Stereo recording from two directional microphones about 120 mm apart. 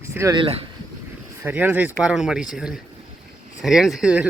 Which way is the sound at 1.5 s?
15° right (ahead or behind).